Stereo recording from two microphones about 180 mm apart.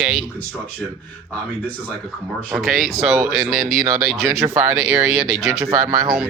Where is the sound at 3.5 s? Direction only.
50° right (ahead or behind).